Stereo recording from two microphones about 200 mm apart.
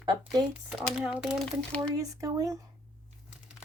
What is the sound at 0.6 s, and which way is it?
Speech, centre (ahead or behind).